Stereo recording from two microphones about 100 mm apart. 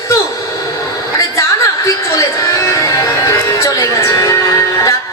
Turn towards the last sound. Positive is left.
turn(degrees=30)  # may be behind; listen again after turning